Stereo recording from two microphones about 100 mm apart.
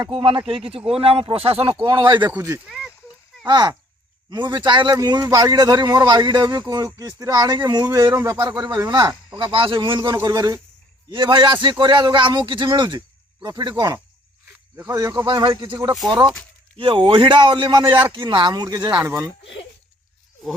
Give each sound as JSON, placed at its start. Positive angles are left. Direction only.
{"t": 0.1, "sound": "a man's voice", "side_deg": -60}
{"t": 1.8, "sound": "speech", "side_deg": -55}
{"t": 2.6, "sound": "speech", "side_deg": -5}
{"t": 3.4, "sound": "speech", "side_deg": -50}
{"t": 4.9, "sound": "speech", "side_deg": -40}
{"t": 8.1, "sound": "speech", "side_deg": -25}
{"t": 8.4, "sound": "a man's voice", "side_deg": -45}
{"t": 10.2, "sound": "speech", "side_deg": -40}
{"t": 11.1, "sound": "speech", "side_deg": -55}
{"t": 15.3, "sound": "speech", "side_deg": -55}
{"t": 16.7, "sound": "a man's voice", "side_deg": -65}
{"t": 19.0, "sound": "speech", "side_deg": -30}